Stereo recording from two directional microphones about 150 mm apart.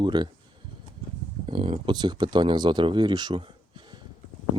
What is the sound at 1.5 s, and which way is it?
Speech, 35° right (ahead or behind).